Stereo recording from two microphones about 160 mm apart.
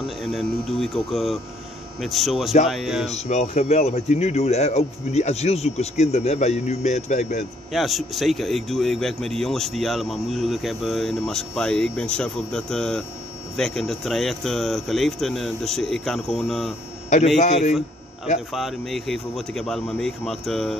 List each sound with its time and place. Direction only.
0.0 s speech: centre (ahead or behind)
3.1 s speech: 45° left (ahead or behind)
7.7 s speech: centre (ahead or behind)
17.4 s speech: 45° left (ahead or behind)
18.5 s speech: centre (ahead or behind)